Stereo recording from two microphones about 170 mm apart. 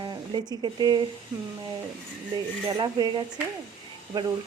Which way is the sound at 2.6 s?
25° right (ahead or behind).